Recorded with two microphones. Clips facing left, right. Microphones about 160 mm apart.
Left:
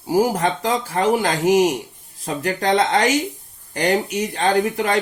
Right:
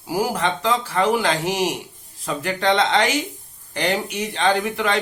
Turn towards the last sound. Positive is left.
turn(degrees=40)  # may be behind; listen again after turning